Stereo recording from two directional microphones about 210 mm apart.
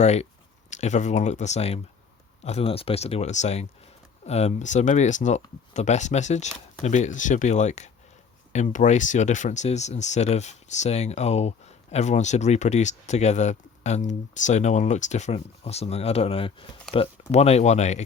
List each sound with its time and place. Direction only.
0.0 s speech: 30° left (ahead or behind)